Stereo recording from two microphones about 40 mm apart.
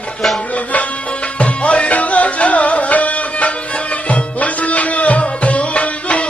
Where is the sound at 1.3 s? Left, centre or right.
Left.